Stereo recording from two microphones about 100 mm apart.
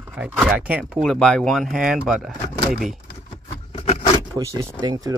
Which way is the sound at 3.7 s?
90° left.